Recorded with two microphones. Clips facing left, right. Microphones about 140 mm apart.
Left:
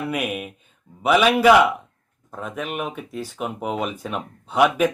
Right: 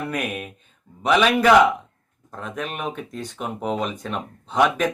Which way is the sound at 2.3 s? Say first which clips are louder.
Left 2 dB; 5° left (ahead or behind).